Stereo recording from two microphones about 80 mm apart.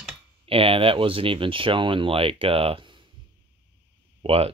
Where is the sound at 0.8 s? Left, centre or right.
Right.